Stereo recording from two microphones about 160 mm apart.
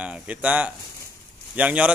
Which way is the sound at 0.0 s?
10° right (ahead or behind).